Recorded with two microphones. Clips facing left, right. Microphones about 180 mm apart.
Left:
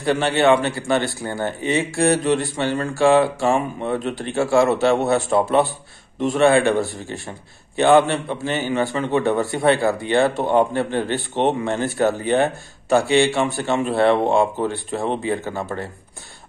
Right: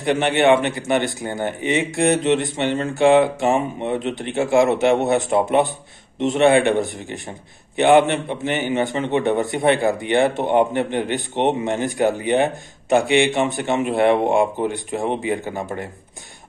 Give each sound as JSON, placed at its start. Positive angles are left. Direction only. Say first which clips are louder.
{"t": 0.0, "sound": "speech", "louder": "even", "side_deg": -20}